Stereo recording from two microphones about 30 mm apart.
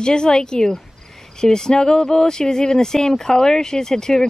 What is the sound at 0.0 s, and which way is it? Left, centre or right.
Speech, left.